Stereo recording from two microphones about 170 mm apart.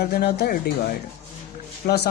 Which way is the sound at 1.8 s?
70° left (ahead or behind).